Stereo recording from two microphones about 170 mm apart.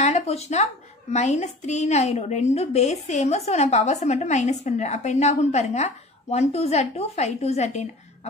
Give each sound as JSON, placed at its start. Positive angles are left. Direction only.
{"t": 0.0, "sound": "a woman's voice", "side_deg": 40}